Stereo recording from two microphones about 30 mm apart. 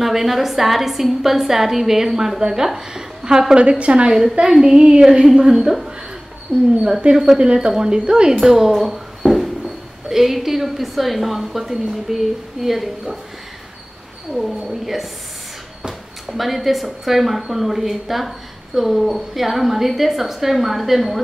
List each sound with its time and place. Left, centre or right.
0.0 s a woman's voice: centre
3.5 s a woman's voice: right
4.4 s speech: right
6.5 s speech: right
7.0 s a woman's voice: right
7.5 s speech: right
8.3 s a woman's voice: centre
8.8 s a sound: centre
10.0 s a woman's voice: centre
14.3 s a woman's voice: centre
16.3 s a woman's voice: centre